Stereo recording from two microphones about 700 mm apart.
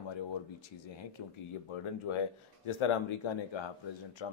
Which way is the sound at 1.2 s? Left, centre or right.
Left.